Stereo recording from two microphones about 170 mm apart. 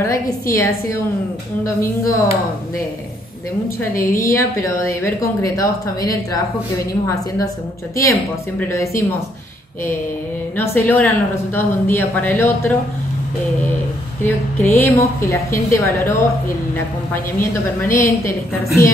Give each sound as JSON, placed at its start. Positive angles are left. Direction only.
{"t": 0.0, "sound": "a woman's voice", "side_deg": 15}
{"t": 3.9, "sound": "a woman's voice", "side_deg": 15}
{"t": 7.9, "sound": "a woman's voice", "side_deg": 15}
{"t": 10.6, "sound": "a woman's voice", "side_deg": 10}
{"t": 14.2, "sound": "a woman's voice", "side_deg": 10}